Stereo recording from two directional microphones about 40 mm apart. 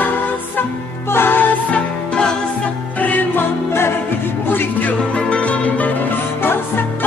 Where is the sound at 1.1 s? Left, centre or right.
Left.